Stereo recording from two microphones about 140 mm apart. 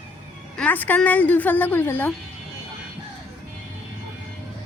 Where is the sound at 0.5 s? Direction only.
10° left (ahead or behind).